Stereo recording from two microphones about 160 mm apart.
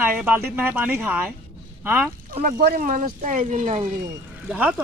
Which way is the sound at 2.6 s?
60° right (ahead or behind).